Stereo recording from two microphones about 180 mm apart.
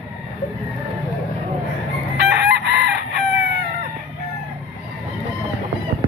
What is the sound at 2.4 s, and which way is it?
Chicken, 75° right (ahead or behind).